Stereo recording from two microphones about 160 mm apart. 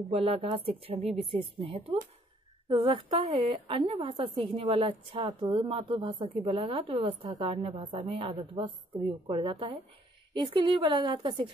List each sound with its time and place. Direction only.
0.1 s a woman's voice: 35° right (ahead or behind)